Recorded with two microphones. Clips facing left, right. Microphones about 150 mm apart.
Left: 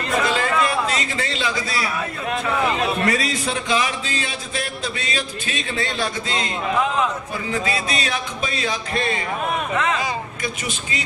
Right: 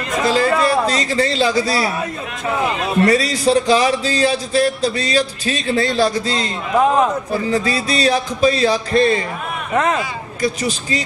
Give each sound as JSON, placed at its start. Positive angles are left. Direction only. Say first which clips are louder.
{"t": 0.2, "sound": "a sound", "louder": "right 7 dB", "side_deg": -35}
{"t": 2.5, "sound": "a man's voice", "louder": "right 4 dB", "side_deg": -35}
{"t": 10.4, "sound": "a man's voice", "louder": "right 8 dB", "side_deg": -35}